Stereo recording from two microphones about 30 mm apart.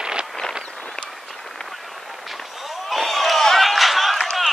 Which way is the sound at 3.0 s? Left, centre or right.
Centre.